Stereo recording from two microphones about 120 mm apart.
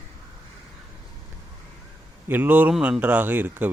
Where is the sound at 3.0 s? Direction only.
15° right (ahead or behind).